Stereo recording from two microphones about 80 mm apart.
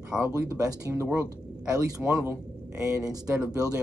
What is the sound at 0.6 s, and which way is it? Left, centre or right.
Speech, right.